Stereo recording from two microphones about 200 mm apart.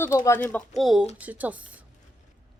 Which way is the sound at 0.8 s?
Centre (ahead or behind).